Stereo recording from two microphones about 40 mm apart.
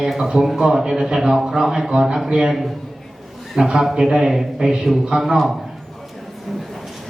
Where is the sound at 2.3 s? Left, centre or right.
Right.